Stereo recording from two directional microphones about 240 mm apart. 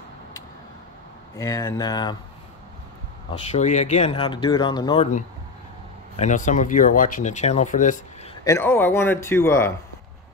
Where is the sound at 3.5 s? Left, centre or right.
Left.